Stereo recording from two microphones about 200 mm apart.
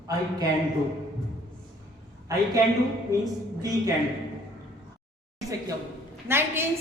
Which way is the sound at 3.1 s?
15° right (ahead or behind).